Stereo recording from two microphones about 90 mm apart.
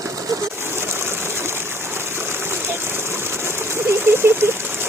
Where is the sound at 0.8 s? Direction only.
30° right (ahead or behind).